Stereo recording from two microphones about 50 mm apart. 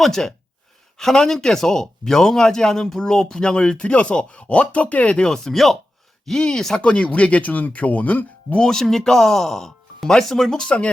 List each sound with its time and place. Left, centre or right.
0.0 s a man's voice: centre
6.8 s speech: left
8.5 s a man's voice: centre